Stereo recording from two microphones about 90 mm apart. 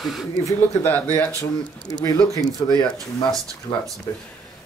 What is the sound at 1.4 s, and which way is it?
Speech, 40° left (ahead or behind).